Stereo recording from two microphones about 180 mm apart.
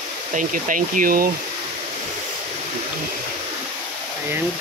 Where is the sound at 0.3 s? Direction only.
45° right (ahead or behind).